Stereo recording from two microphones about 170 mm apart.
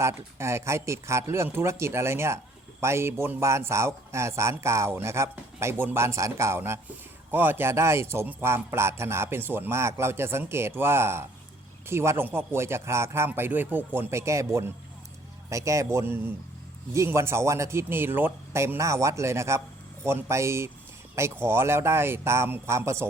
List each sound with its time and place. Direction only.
0.0 s a man's voice: 15° right (ahead or behind)